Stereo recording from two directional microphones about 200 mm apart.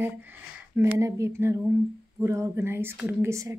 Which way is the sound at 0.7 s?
15° right (ahead or behind).